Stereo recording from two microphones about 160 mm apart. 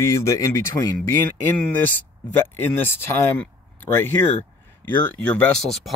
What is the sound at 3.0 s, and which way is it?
Speech, 15° left (ahead or behind).